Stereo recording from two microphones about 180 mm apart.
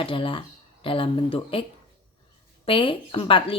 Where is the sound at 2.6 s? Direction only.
30° left (ahead or behind).